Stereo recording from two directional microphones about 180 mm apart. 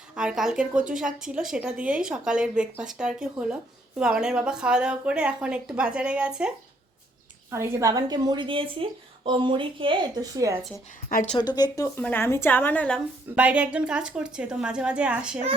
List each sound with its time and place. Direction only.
0.2 s speech: 5° right (ahead or behind)
7.5 s a woman's voice: 15° right (ahead or behind)
11.1 s a woman's voice: 45° left (ahead or behind)
11.5 s speech: 20° left (ahead or behind)
11.9 s a woman's voice: 10° left (ahead or behind)
13.3 s speech: 5° right (ahead or behind)